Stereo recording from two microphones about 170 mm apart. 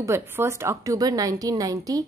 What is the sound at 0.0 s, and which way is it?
A woman's voice, 15° right (ahead or behind).